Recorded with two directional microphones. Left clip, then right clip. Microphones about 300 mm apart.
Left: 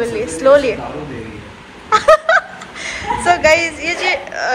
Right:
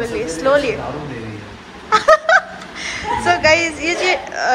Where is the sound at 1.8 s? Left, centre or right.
Centre.